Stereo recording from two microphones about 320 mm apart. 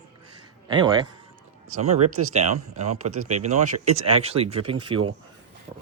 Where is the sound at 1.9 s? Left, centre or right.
Right.